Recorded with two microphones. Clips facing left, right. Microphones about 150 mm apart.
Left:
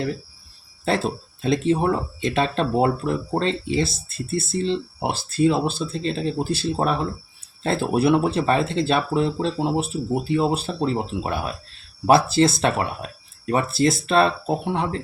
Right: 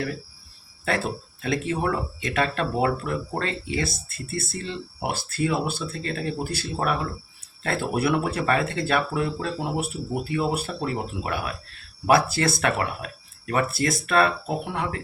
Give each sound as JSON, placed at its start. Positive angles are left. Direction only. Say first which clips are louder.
{"t": 0.9, "sound": "speech", "louder": "left 4 dB", "side_deg": 25}